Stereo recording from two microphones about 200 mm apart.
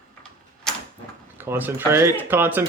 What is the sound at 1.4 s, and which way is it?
Speech, 10° right (ahead or behind).